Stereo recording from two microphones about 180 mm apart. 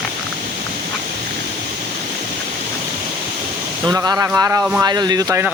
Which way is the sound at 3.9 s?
15° right (ahead or behind).